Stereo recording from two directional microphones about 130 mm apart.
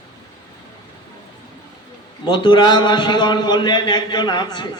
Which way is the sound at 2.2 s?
35° left (ahead or behind).